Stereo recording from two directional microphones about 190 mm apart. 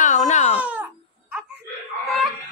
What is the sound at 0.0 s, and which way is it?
Baby cry, 40° left (ahead or behind).